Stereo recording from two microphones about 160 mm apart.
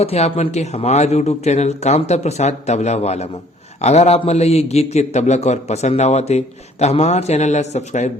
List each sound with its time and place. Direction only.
0.0 s a man's voice: 40° left (ahead or behind)